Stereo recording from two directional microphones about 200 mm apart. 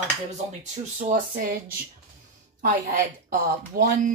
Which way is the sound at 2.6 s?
45° right (ahead or behind).